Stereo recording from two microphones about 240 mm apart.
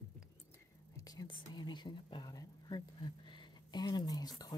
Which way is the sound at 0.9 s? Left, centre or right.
Centre.